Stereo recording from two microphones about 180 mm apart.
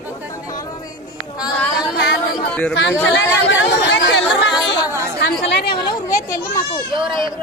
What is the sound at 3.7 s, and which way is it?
Chatter, 80° left.